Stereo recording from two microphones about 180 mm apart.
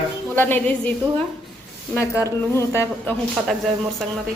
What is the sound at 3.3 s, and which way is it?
Speech, centre (ahead or behind).